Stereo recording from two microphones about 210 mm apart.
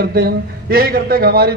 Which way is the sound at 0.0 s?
45° right (ahead or behind).